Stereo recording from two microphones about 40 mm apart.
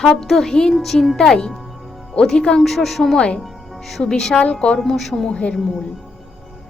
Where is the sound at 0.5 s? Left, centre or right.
Centre.